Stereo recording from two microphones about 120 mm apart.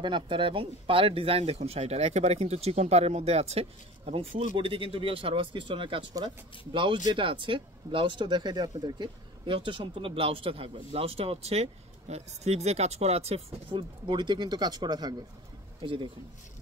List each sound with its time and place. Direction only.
0.0 s speech: 40° right (ahead or behind)
15.8 s speech: 45° right (ahead or behind)